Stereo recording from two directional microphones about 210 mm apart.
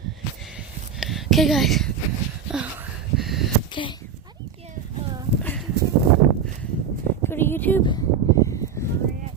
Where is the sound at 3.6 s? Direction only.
20° left (ahead or behind).